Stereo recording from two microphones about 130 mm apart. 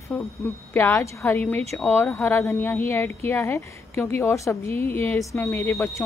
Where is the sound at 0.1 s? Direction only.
10° left (ahead or behind).